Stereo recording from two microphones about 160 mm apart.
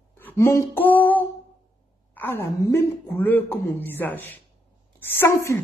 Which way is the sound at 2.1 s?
15° left (ahead or behind).